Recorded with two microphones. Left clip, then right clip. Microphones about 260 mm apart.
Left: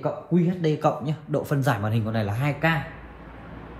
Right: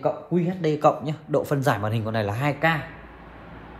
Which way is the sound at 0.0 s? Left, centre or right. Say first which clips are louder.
Right 1 dB; right.